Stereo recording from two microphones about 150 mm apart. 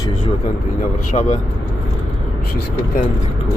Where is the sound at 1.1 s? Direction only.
50° left (ahead or behind).